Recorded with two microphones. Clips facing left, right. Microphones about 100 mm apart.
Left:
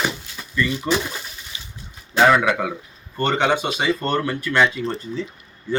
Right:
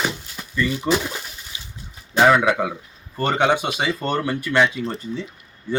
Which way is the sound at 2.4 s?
20° right (ahead or behind).